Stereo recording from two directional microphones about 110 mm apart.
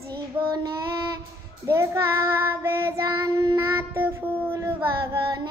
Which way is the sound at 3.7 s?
20° right (ahead or behind).